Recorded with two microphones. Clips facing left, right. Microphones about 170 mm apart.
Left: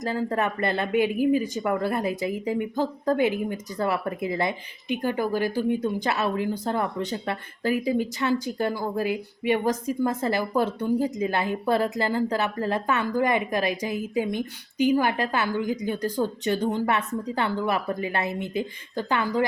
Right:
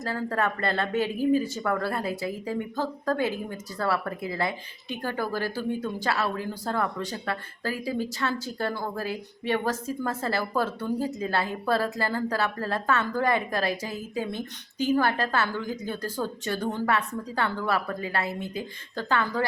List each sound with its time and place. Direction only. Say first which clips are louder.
0.0 s a woman's voice: left 2 dB; 20° left (ahead or behind)